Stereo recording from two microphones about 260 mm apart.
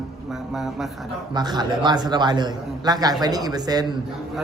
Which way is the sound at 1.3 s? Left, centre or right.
Centre.